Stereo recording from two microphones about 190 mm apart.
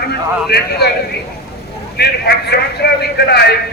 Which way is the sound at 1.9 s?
60° left (ahead or behind).